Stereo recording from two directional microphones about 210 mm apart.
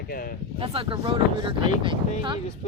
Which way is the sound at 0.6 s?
25° right (ahead or behind).